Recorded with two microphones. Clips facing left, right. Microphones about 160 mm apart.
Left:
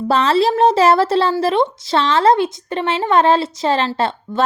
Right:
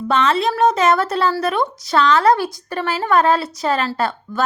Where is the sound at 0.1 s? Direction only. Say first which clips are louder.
Left 3 dB; 30° left (ahead or behind).